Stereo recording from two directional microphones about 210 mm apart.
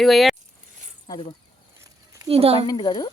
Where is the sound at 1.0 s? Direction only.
20° left (ahead or behind).